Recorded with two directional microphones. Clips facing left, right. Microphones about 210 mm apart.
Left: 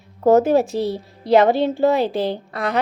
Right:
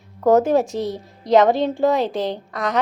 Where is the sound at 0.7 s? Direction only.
30° left (ahead or behind).